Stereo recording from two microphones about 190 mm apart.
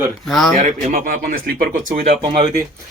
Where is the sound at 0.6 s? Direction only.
40° right (ahead or behind).